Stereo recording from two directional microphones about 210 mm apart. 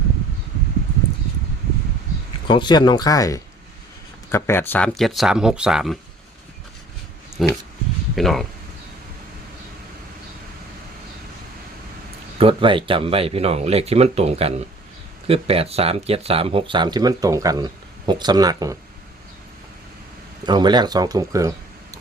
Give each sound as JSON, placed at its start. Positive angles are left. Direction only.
{"t": 2.5, "sound": "speech", "side_deg": 20}
{"t": 7.4, "sound": "speech", "side_deg": 0}
{"t": 12.4, "sound": "speech", "side_deg": -25}
{"t": 20.4, "sound": "speech", "side_deg": -20}